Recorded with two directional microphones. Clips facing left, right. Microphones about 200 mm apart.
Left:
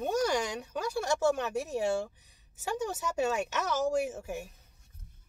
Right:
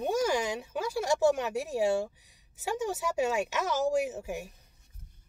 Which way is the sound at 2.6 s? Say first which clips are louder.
Right 2 dB; 10° right (ahead or behind).